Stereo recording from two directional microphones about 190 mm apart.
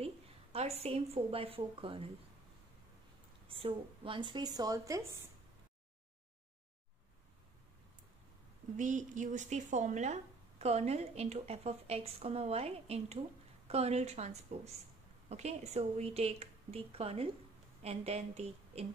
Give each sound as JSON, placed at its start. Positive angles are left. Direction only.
{"t": 0.0, "sound": "a woman's voice", "side_deg": -30}
{"t": 3.4, "sound": "a woman's voice", "side_deg": -30}
{"t": 8.7, "sound": "speech", "side_deg": -40}